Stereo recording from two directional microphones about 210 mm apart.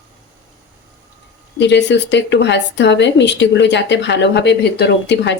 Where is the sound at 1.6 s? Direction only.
55° left (ahead or behind).